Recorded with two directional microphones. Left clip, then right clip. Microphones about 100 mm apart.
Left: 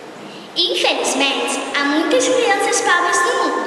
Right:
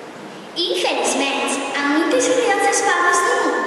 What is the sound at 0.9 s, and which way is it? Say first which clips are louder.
A woman's voice: left 2 dB; 15° left (ahead or behind).